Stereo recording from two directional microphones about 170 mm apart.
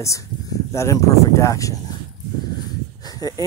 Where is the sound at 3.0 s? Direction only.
20° left (ahead or behind).